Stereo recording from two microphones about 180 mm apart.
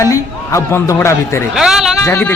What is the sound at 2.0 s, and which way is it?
Speech, 15° left (ahead or behind).